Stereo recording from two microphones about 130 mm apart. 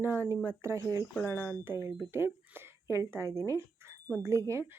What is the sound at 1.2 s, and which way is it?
Speech, 15° left (ahead or behind).